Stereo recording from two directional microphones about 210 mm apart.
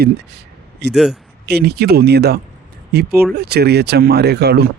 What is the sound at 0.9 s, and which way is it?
Speech, centre (ahead or behind).